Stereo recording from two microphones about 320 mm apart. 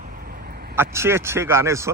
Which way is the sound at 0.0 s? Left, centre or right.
Right.